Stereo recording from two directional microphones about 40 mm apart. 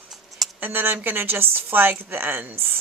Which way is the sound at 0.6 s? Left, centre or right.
Right.